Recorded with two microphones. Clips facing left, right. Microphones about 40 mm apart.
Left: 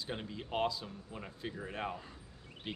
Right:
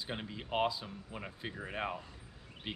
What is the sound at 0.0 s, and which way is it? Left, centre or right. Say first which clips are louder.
Speech: even; centre.